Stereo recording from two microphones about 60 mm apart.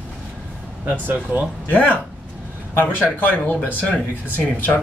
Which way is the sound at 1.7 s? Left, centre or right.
Left.